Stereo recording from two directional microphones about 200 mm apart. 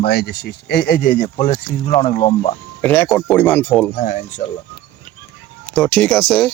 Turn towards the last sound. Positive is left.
turn(degrees=5)  # may be behind; listen again after turning